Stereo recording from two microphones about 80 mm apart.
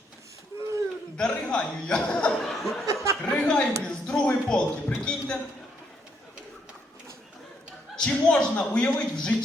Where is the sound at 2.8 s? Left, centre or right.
Right.